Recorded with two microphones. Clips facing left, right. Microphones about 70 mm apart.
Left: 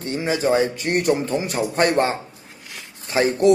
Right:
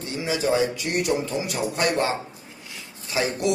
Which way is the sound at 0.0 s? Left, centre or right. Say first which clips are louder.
Left 4 dB; left.